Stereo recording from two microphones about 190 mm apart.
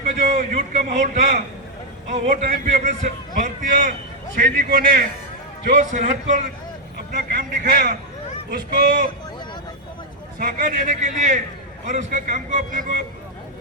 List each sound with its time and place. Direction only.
0.2 s a man's voice: 35° right (ahead or behind)
10.3 s a man's voice: 45° right (ahead or behind)